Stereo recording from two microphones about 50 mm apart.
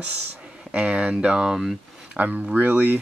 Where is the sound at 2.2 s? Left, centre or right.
Right.